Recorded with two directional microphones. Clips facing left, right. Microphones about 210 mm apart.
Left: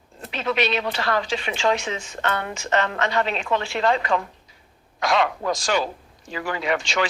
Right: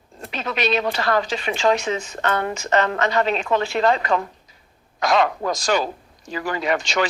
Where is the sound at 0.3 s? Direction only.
40° right (ahead or behind).